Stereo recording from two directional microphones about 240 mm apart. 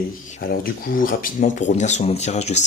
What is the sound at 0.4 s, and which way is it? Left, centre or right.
Speech, left.